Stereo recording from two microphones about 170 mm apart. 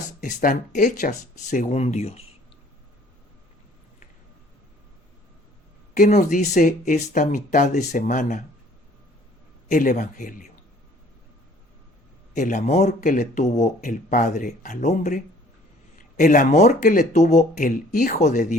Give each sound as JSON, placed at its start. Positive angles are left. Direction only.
{"t": 0.2, "sound": "speech", "side_deg": 55}
{"t": 6.0, "sound": "speech", "side_deg": 45}
{"t": 9.6, "sound": "speech", "side_deg": 50}
{"t": 12.3, "sound": "speech", "side_deg": 45}